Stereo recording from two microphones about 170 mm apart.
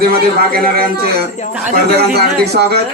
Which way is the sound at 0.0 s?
65° right (ahead or behind).